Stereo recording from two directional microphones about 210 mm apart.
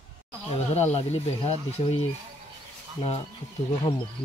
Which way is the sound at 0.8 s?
30° left (ahead or behind).